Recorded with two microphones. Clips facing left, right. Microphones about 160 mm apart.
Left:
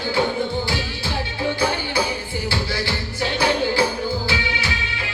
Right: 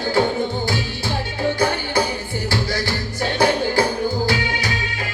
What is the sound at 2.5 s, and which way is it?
Music, 45° right (ahead or behind).